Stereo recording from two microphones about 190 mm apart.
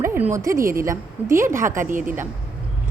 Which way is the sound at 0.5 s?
50° right (ahead or behind).